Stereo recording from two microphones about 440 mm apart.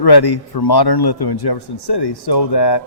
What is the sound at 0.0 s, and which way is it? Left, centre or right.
A man's voice, left.